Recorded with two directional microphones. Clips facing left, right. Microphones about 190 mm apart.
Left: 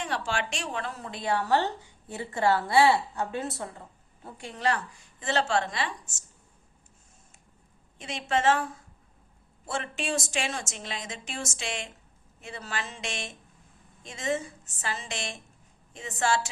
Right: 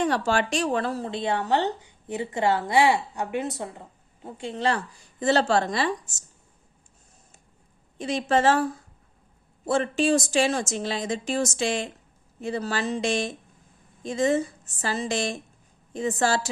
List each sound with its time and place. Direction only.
0.0 s a woman's voice: 40° right (ahead or behind)
5.2 s speech: 40° right (ahead or behind)
7.9 s speech: 35° right (ahead or behind)